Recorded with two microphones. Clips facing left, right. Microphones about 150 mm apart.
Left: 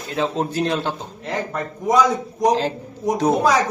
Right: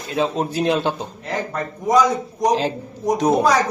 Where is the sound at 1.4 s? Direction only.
Centre (ahead or behind).